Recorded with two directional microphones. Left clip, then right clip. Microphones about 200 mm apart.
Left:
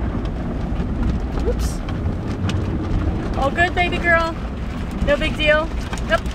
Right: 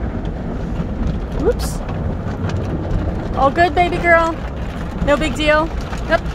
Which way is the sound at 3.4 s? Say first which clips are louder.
Right 5 dB; 30° right (ahead or behind).